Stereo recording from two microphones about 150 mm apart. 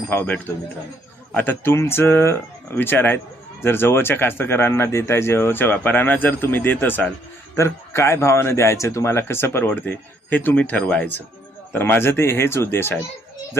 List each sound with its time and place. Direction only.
0.1 s speech: 15° left (ahead or behind)